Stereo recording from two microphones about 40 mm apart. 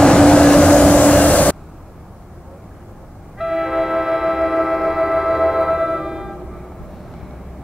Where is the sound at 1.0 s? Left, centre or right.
Left.